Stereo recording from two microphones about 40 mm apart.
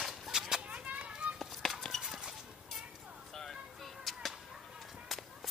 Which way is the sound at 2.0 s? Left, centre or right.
Centre.